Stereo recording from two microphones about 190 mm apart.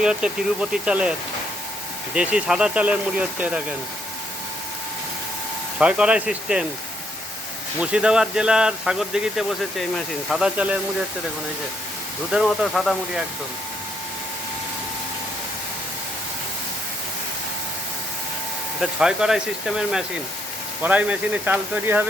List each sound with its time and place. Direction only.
0.0 s speech: 5° right (ahead or behind)
2.1 s speech: 5° right (ahead or behind)
5.8 s speech: 5° right (ahead or behind)
7.8 s speech: 5° right (ahead or behind)
12.3 s speech: centre (ahead or behind)
18.8 s speech: 5° right (ahead or behind)